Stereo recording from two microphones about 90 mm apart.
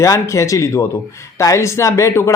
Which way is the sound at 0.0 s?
35° left (ahead or behind).